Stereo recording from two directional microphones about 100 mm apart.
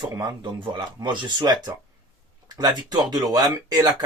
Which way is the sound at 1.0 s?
40° right (ahead or behind).